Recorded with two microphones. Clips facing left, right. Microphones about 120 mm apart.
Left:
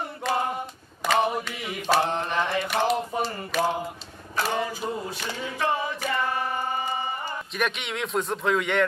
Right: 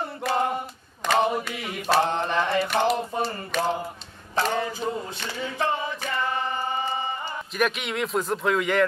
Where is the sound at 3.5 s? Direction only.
5° left (ahead or behind).